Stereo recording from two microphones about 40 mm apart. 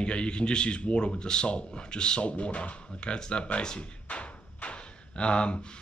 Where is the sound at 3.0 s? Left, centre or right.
Left.